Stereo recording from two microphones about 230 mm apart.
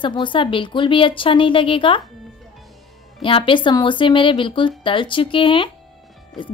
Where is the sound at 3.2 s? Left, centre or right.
Left.